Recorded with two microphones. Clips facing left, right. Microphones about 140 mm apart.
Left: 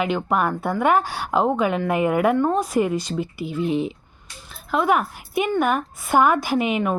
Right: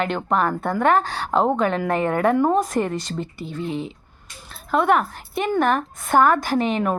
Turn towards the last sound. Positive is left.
turn(degrees=10)  # may be behind; listen again after turning